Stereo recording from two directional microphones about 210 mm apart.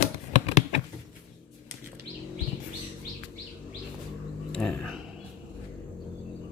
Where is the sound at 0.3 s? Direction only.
30° left (ahead or behind).